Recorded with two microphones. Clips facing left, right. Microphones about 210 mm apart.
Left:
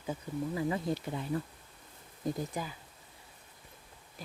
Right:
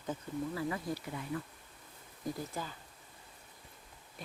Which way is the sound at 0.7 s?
25° left (ahead or behind).